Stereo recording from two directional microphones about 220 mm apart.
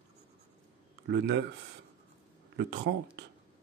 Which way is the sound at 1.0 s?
50° right (ahead or behind).